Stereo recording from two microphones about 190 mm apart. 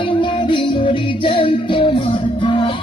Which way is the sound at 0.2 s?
25° left (ahead or behind).